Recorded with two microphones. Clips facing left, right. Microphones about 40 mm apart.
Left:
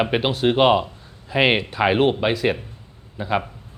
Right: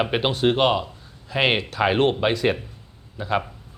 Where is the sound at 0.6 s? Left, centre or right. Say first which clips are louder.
Left 4 dB; centre.